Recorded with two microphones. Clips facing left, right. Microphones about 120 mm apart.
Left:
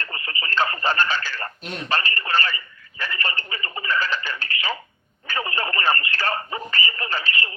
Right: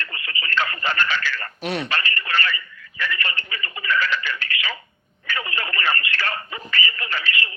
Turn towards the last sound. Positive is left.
turn(degrees=35)  # may be behind; listen again after turning